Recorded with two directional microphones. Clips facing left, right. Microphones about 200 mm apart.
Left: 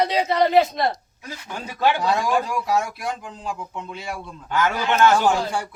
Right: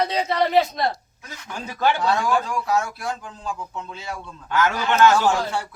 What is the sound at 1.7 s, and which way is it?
A man's voice, 15° left (ahead or behind).